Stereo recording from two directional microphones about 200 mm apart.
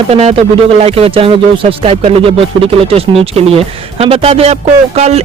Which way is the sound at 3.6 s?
30° right (ahead or behind).